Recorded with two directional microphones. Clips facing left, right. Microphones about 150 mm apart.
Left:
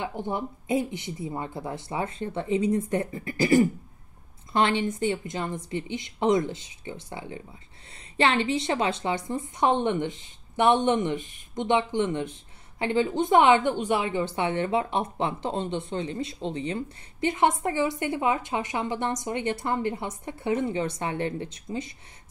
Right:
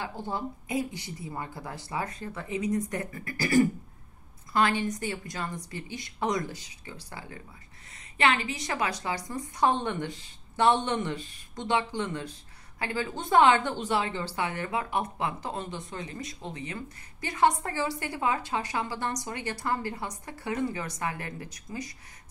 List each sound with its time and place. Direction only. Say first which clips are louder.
0.0 s a woman's voice: left 3 dB; 20° left (ahead or behind)